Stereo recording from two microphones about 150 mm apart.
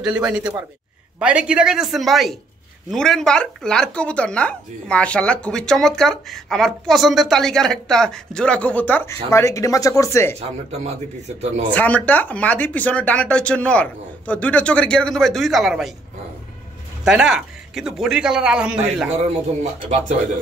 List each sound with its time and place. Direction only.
0.0 s speech: 5° right (ahead or behind); by 10.3 s 20° left (ahead or behind)
10.4 s speech: 45° right (ahead or behind)
11.7 s speech: 10° left (ahead or behind)
17.0 s speech: 5° right (ahead or behind)
19.6 s speech: 50° right (ahead or behind)